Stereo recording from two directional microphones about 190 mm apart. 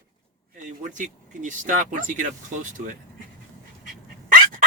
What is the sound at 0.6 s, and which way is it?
Speech, 40° right (ahead or behind).